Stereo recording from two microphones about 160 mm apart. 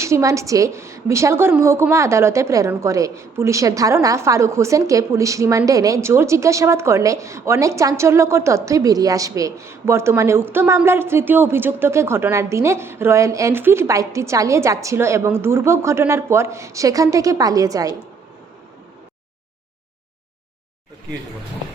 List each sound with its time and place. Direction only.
0.0 s a woman's voice: 20° right (ahead or behind)